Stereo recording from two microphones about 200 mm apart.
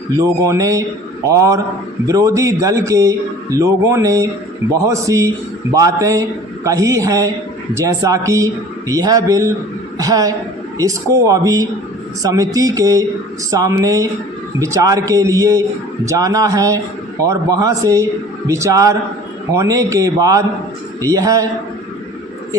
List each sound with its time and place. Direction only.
0.2 s a man's voice: 15° right (ahead or behind)